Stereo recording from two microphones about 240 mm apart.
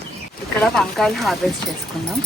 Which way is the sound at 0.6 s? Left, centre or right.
Centre.